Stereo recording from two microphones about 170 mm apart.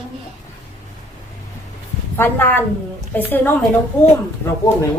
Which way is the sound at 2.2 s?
10° left (ahead or behind).